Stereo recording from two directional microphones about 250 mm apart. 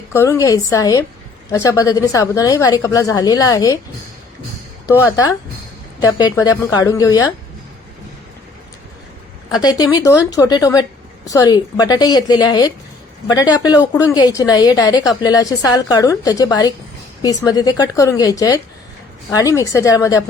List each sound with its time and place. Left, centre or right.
0.1 s a woman's voice: centre
4.9 s a woman's voice: centre
9.6 s a woman's voice: centre